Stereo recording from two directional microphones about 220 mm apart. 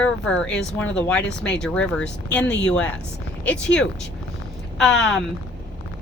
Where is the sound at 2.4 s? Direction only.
55° left (ahead or behind).